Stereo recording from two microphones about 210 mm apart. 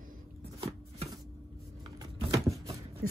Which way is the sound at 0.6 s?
30° right (ahead or behind).